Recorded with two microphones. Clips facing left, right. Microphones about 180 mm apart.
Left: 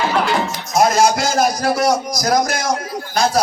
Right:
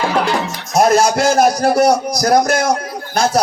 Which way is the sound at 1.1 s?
60° right (ahead or behind).